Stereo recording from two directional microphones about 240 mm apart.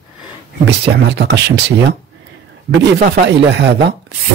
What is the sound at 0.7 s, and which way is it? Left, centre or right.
Speech, right.